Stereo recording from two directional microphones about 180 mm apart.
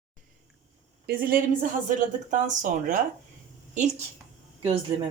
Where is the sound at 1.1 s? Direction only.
55° right (ahead or behind).